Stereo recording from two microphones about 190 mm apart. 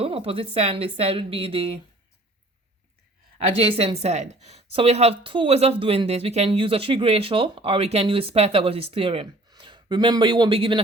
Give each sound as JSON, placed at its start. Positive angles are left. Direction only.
{"t": 0.0, "sound": "speech", "side_deg": -30}
{"t": 3.5, "sound": "a woman's voice", "side_deg": -30}